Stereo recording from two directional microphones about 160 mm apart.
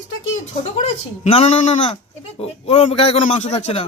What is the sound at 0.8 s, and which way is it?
A man's voice, 40° left (ahead or behind).